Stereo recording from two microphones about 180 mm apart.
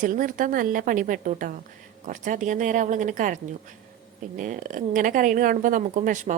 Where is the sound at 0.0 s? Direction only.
50° right (ahead or behind).